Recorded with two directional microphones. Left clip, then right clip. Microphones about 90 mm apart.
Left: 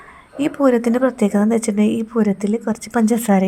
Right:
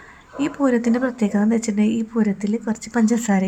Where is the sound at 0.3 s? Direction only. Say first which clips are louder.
Left 4 dB; 30° left (ahead or behind).